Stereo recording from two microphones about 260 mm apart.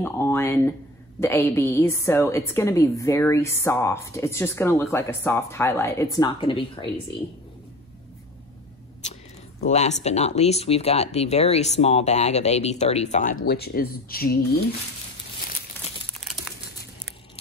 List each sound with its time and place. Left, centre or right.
0.0 s a woman's voice: centre
9.7 s speech: left
13.5 s speech: left
16.2 s crumpling: centre